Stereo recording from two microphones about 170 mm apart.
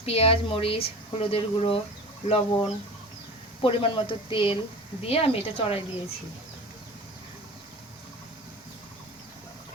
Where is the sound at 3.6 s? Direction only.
30° left (ahead or behind).